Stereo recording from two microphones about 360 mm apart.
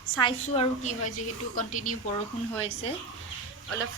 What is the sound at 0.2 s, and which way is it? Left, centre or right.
A woman's voice, centre.